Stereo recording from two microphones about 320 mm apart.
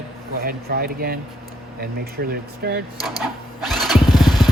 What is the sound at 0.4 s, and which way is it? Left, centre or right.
Speech, right.